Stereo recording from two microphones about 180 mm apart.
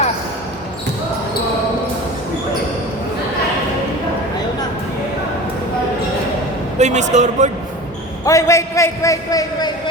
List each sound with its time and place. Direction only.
6.7 s speech: 40° right (ahead or behind)
8.2 s a man's voice: 15° left (ahead or behind)